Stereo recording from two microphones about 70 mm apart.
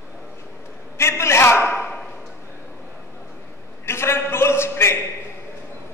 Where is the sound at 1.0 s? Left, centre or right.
Left.